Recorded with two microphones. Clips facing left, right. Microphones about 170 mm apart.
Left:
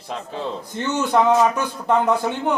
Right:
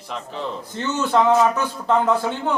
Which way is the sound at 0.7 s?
15° left (ahead or behind).